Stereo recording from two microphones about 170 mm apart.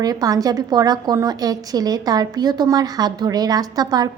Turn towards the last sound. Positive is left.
turn(degrees=-25)  # may be behind; listen again after turning